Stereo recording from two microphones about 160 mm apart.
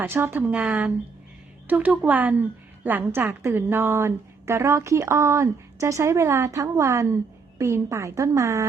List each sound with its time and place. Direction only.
0.0 s a woman's voice: 15° right (ahead or behind)